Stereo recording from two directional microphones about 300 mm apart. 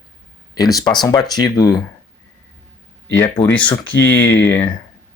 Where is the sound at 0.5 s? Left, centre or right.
Centre.